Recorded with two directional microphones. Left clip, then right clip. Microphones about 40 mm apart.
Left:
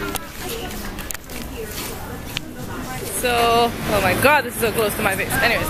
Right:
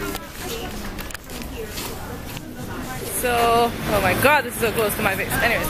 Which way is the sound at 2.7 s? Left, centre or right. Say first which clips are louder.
Left 2 dB; centre.